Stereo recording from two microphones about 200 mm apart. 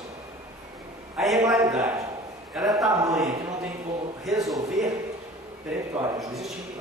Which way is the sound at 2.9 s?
15° right (ahead or behind).